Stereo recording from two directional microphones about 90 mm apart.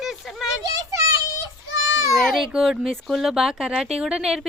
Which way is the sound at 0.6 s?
40° right (ahead or behind).